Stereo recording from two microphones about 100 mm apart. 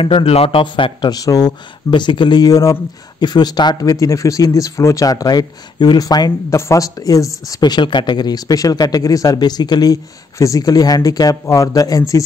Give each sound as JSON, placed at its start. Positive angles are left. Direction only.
{"t": 0.0, "sound": "a man's voice", "side_deg": 65}
{"t": 1.1, "sound": "speech", "side_deg": 40}
{"t": 1.9, "sound": "speech", "side_deg": 50}
{"t": 3.2, "sound": "speech", "side_deg": 45}